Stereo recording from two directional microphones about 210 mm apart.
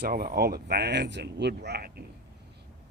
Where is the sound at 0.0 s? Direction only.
45° right (ahead or behind).